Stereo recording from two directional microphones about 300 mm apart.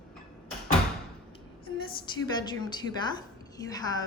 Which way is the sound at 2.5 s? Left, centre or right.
Centre.